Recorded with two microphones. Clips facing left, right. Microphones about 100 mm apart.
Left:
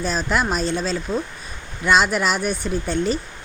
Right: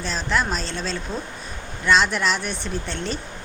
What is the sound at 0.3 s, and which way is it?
Speech, 10° left (ahead or behind).